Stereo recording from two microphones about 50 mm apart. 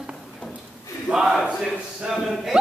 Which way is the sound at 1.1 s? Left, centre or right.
Centre.